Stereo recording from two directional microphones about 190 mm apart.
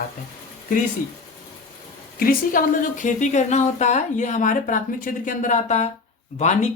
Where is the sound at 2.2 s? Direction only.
45° left (ahead or behind).